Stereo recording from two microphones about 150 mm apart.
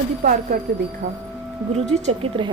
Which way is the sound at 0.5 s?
70° right (ahead or behind).